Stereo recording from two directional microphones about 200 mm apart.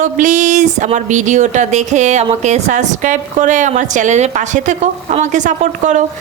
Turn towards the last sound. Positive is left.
turn(degrees=-40)  # may be behind; listen again after turning